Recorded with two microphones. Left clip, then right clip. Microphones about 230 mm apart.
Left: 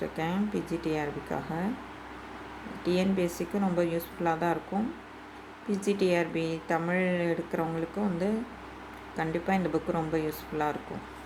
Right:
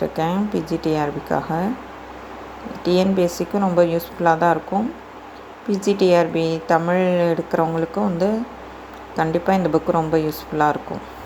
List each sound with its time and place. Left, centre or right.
0.2 s a woman's voice: centre
2.8 s a woman's voice: centre
5.7 s a woman's voice: centre